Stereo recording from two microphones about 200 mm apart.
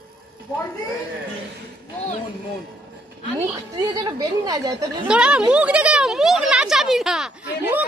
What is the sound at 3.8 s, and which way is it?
Speech, 20° right (ahead or behind).